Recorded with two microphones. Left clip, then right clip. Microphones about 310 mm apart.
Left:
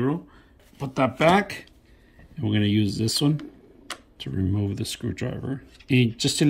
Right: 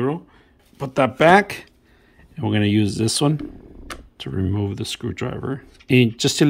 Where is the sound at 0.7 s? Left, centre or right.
Centre.